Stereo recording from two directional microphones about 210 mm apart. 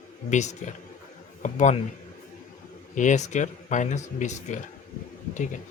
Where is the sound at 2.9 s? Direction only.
35° left (ahead or behind).